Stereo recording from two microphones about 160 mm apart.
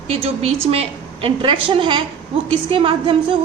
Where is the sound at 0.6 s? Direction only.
40° right (ahead or behind).